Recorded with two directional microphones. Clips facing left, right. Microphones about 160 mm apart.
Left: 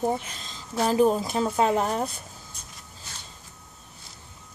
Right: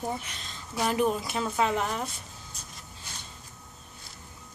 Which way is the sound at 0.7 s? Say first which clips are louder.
Left 5 dB; 35° left (ahead or behind).